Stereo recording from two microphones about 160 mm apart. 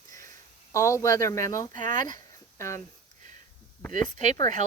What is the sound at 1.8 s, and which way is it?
Speech, 50° right (ahead or behind).